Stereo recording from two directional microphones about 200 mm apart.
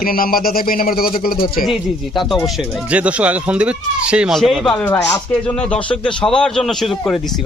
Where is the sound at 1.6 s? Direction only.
Centre (ahead or behind).